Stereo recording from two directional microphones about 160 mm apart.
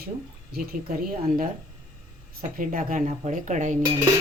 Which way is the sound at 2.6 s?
60° right (ahead or behind).